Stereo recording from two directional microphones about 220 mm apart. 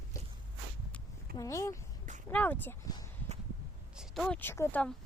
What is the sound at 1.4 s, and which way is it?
Speech, 15° left (ahead or behind).